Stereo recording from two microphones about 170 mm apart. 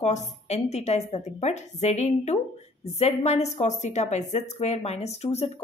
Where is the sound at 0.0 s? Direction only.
40° left (ahead or behind).